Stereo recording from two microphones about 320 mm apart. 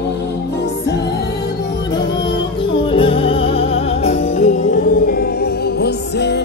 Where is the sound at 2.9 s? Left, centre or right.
Centre.